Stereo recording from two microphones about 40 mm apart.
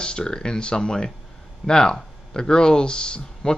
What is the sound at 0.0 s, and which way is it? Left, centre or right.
Speech, left.